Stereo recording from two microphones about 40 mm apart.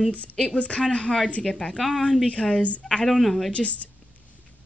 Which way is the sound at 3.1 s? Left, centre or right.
Centre.